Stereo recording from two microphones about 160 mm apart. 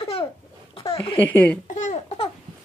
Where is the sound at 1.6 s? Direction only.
50° left (ahead or behind).